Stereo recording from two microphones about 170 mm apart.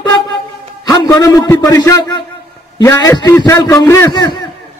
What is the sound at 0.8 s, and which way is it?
A man's voice, 20° left (ahead or behind).